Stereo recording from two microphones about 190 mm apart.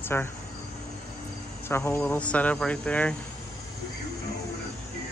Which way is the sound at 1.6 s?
10° left (ahead or behind).